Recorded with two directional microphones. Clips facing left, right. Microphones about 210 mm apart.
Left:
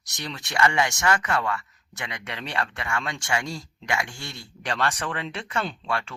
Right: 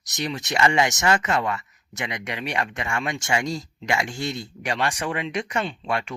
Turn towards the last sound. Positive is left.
turn(degrees=-20)  # may be behind; listen again after turning